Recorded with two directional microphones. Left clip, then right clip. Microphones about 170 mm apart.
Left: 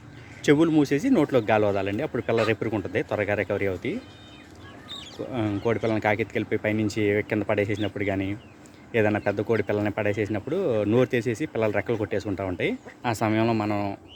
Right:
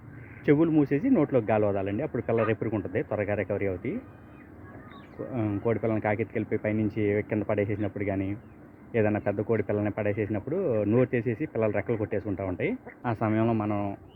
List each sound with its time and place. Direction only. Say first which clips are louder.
0.4 s speech: left 3 dB; 20° left (ahead or behind)
5.3 s speech: left 3 dB; 20° left (ahead or behind)